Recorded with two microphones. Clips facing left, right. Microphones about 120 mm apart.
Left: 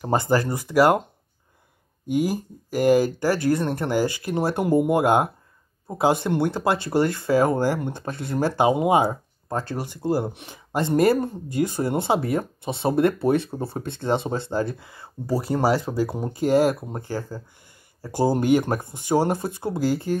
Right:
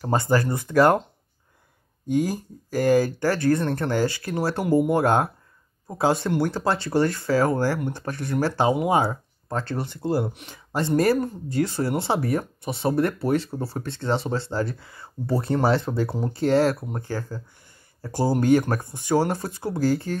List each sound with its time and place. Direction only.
0.0 s speech: 15° left (ahead or behind)
2.0 s speech: 15° left (ahead or behind)
15.2 s speech: 5° left (ahead or behind)